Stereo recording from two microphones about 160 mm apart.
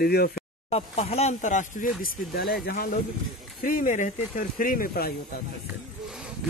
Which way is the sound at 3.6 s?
55° left (ahead or behind).